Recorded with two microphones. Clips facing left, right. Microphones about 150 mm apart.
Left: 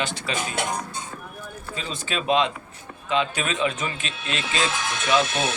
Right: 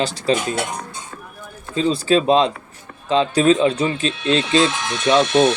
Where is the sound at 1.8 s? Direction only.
35° right (ahead or behind).